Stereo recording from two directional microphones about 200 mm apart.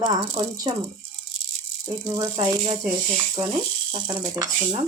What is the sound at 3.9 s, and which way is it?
Speech, 20° right (ahead or behind).